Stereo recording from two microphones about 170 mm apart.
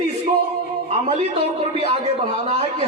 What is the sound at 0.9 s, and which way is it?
A man's voice, 40° right (ahead or behind).